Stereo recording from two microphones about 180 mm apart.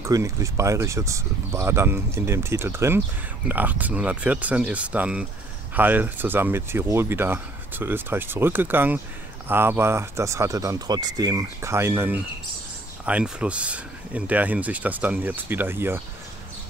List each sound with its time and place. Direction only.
0.0 s speech: 15° right (ahead or behind)